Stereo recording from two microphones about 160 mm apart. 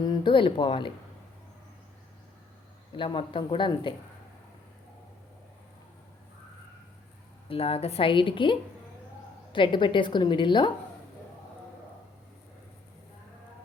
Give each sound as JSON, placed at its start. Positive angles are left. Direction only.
{"t": 0.0, "sound": "speech", "side_deg": 25}
{"t": 2.9, "sound": "speech", "side_deg": 30}
{"t": 7.4, "sound": "a woman's voice", "side_deg": 35}